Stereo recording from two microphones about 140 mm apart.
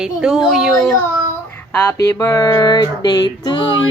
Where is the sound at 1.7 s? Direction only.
20° left (ahead or behind).